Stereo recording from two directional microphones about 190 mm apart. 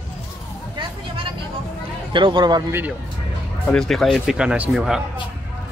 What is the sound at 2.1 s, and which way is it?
Speech, 25° right (ahead or behind).